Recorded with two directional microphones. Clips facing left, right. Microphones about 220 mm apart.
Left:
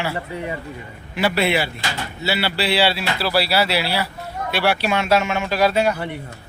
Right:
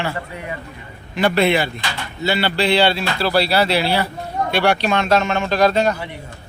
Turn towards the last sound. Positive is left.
turn(degrees=10)  # may be behind; listen again after turning